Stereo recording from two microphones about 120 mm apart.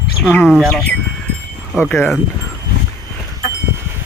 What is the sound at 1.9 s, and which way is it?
Speech, 20° left (ahead or behind).